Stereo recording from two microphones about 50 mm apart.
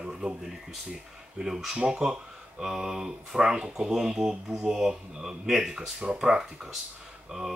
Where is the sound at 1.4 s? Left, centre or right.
Centre.